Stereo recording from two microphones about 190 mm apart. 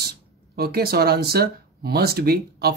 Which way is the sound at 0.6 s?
55° right (ahead or behind).